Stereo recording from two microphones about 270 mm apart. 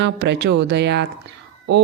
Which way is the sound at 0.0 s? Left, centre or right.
Right.